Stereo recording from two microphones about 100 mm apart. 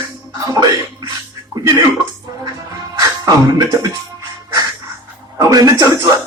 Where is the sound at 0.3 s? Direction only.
40° right (ahead or behind).